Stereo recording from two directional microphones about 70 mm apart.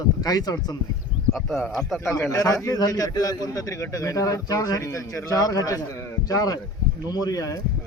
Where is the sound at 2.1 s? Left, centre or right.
Left.